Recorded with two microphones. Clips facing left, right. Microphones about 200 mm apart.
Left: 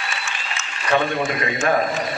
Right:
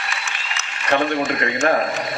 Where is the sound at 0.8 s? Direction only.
65° right (ahead or behind).